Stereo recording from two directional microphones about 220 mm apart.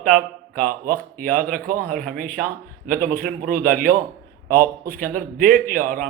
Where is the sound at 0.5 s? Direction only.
40° right (ahead or behind).